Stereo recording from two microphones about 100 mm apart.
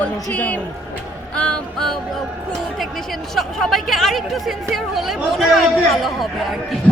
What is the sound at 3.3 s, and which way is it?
Speech, centre (ahead or behind).